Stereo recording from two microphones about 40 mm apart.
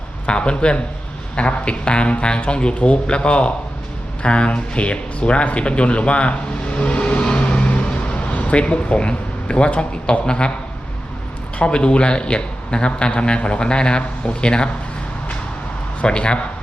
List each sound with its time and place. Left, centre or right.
0.3 s a man's voice: left
11.6 s a man's voice: left
16.0 s a man's voice: left